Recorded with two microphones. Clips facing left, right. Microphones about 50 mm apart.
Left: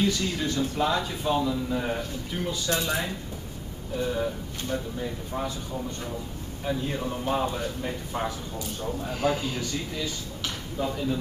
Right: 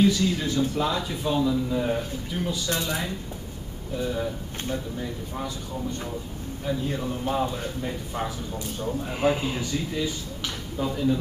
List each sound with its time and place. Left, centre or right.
0.4 s a man's voice: centre
4.0 s speech: centre
6.6 s a man's voice: centre
8.7 s speech: centre
10.8 s speech: centre